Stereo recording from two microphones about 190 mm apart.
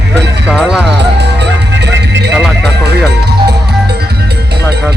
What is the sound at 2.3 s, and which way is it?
Music, 5° right (ahead or behind).